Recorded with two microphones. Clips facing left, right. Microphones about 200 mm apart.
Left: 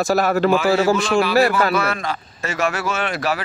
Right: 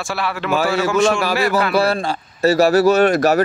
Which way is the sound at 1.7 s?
35° right (ahead or behind).